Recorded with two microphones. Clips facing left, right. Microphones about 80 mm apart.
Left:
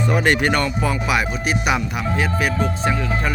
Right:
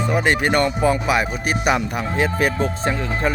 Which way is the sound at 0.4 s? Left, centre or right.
Right.